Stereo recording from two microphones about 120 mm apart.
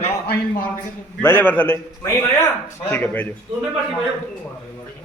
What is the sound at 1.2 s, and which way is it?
A man's voice, 15° left (ahead or behind).